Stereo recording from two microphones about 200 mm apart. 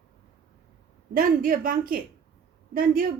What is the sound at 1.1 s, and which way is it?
A man's voice, 45° right (ahead or behind).